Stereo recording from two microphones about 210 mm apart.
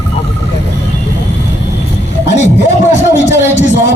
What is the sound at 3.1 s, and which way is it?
Speech, 55° left (ahead or behind).